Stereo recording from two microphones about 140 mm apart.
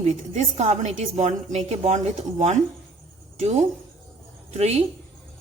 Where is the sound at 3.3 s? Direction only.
50° right (ahead or behind).